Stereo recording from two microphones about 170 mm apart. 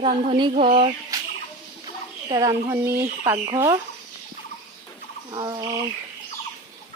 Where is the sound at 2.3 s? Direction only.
20° right (ahead or behind).